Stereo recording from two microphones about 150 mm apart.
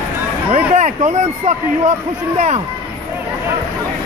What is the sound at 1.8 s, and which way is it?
Speech, 50° right (ahead or behind).